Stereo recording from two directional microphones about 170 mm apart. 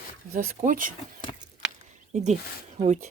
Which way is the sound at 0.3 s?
50° right (ahead or behind).